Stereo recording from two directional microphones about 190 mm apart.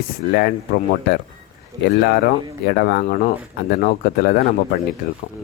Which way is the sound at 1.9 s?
55° left (ahead or behind).